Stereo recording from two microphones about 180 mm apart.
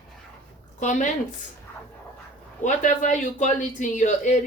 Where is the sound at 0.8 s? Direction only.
45° left (ahead or behind).